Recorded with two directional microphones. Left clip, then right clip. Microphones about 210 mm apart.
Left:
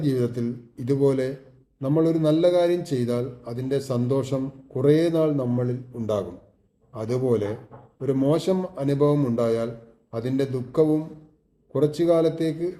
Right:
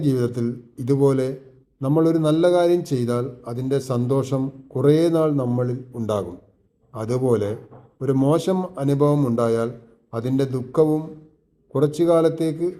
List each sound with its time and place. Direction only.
0.0 s a man's voice: 25° right (ahead or behind)